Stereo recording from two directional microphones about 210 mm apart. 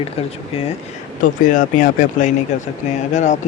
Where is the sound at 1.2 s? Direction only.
40° left (ahead or behind).